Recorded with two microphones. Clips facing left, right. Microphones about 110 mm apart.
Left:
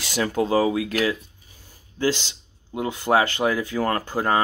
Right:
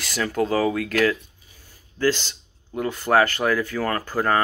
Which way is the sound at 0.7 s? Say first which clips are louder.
Right 1 dB; 65° right (ahead or behind).